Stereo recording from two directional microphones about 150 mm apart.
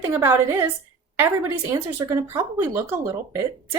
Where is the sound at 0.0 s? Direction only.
15° right (ahead or behind).